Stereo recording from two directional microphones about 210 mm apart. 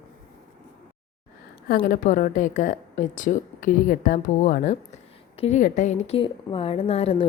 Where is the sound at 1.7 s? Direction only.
45° left (ahead or behind).